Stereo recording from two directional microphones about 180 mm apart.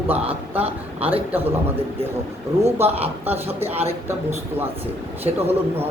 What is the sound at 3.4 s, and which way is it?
Speech, 35° right (ahead or behind).